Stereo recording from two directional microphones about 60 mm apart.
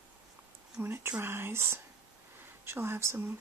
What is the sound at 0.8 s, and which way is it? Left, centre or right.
Speech, right.